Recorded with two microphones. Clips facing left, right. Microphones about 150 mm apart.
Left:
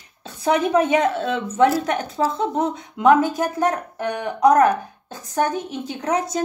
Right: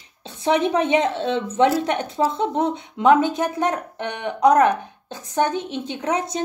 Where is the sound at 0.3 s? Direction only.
25° right (ahead or behind).